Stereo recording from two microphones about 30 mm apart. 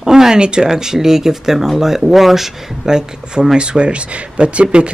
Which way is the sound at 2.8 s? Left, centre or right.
Right.